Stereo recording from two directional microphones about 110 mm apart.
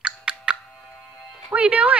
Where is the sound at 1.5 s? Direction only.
10° right (ahead or behind).